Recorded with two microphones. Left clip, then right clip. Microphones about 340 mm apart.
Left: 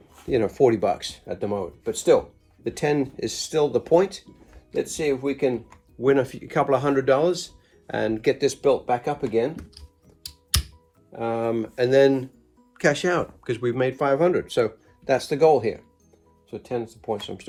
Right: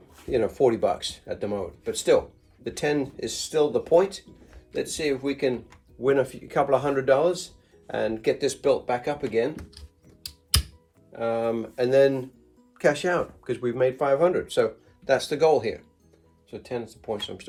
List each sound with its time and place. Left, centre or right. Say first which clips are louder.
0.3 s speech: left 2 dB; left
9.6 s speech: left 1 dB; centre
11.1 s speech: left 1 dB; left